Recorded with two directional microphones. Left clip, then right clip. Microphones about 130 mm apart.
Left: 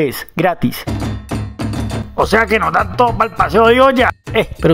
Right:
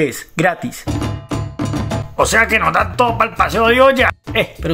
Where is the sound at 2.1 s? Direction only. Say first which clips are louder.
Even; 60° left (ahead or behind).